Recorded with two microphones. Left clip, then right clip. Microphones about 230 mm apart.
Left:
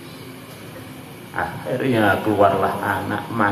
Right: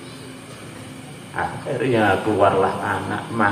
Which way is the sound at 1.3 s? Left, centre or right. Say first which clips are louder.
Left 1 dB; left.